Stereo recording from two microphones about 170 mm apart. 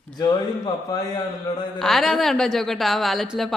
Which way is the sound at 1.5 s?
20° left (ahead or behind).